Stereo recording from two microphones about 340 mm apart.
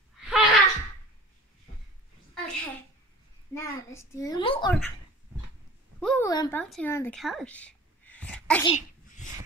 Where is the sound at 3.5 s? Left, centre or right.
Centre.